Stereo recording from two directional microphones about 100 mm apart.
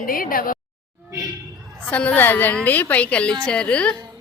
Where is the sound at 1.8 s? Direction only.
15° left (ahead or behind).